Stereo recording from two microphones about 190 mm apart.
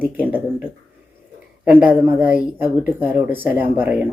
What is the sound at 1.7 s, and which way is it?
Speech, 5° right (ahead or behind).